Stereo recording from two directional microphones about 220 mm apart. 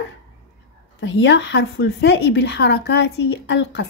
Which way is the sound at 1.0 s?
55° left (ahead or behind).